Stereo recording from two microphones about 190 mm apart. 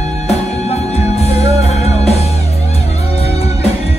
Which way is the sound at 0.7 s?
35° left (ahead or behind).